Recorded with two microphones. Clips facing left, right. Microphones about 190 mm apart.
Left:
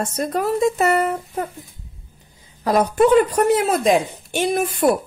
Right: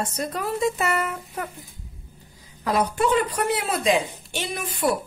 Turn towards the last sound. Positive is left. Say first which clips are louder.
# left 8 dB
turn(degrees=50)  # may be behind; listen again after turning